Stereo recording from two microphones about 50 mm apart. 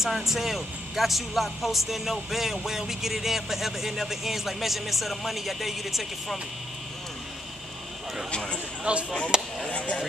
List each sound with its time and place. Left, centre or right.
0.0 s speech: centre
8.3 s speech: centre
8.9 s speech: right
9.7 s speech: left